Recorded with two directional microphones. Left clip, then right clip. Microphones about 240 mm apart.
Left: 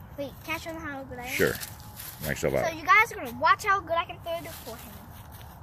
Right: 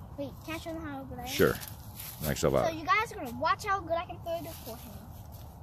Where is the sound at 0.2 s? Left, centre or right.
Centre.